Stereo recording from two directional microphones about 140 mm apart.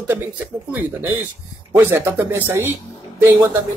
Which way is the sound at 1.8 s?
15° right (ahead or behind).